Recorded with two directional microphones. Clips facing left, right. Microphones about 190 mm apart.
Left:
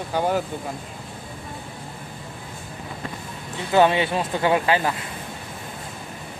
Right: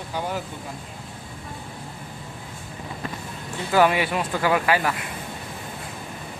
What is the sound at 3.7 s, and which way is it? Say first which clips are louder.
Speech: left 2 dB; 25° left (ahead or behind).